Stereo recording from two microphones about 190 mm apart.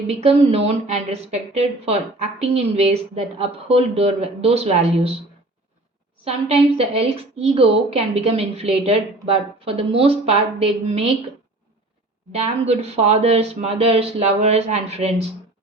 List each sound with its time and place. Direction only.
0.1 s speech: 35° right (ahead or behind)
6.2 s speech: 30° right (ahead or behind)
12.3 s speech: 35° right (ahead or behind)